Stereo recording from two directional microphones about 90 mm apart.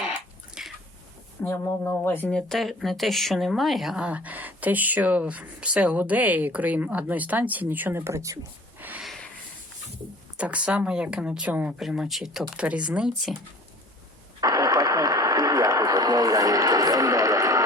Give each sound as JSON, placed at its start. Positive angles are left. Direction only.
{"t": 0.6, "sound": "a sound", "side_deg": -5}
{"t": 1.4, "sound": "speech", "side_deg": 25}
{"t": 2.3, "sound": "speech", "side_deg": 5}
{"t": 4.0, "sound": "speech", "side_deg": -15}
{"t": 8.8, "sound": "a sound", "side_deg": -20}
{"t": 10.3, "sound": "speech", "side_deg": -15}
{"t": 11.8, "sound": "speech", "side_deg": -5}
{"t": 14.4, "sound": "radio", "side_deg": -45}